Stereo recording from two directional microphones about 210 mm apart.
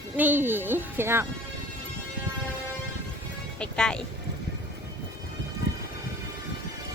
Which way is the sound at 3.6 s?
5° left (ahead or behind).